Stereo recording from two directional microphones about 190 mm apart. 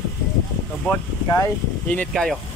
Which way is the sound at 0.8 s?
10° left (ahead or behind).